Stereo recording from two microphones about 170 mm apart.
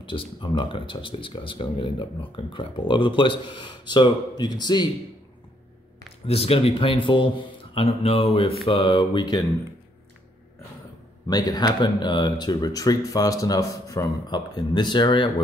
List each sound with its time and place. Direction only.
0.0 s speech: 30° left (ahead or behind)
6.2 s a man's voice: 35° left (ahead or behind)
11.2 s speech: 25° left (ahead or behind)